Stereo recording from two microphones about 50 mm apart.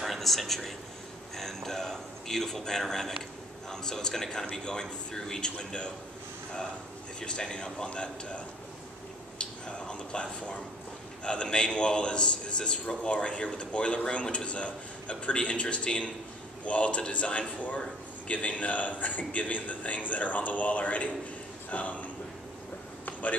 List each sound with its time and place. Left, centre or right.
0.0 s a sound: centre
3.7 s speech: centre
7.2 s a man's voice: centre
9.4 s a man's voice: left